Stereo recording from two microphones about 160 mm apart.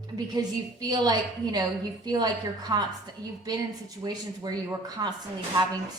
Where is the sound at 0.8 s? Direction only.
25° right (ahead or behind).